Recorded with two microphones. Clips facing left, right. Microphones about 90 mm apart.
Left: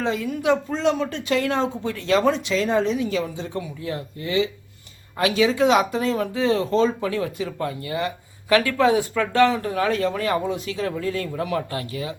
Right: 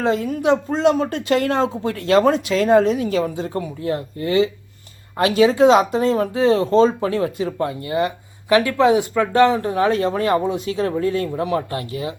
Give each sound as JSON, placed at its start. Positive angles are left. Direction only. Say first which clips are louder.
{"t": 0.0, "sound": "speech", "louder": "right 4 dB", "side_deg": -40}